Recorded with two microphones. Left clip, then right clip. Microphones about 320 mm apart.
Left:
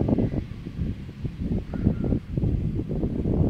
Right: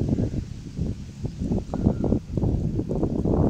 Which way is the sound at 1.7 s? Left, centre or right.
Right.